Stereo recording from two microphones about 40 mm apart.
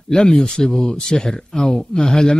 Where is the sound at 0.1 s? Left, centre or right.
Centre.